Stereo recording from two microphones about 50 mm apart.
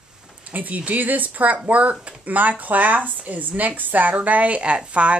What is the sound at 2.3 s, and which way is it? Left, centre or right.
A woman's voice, right.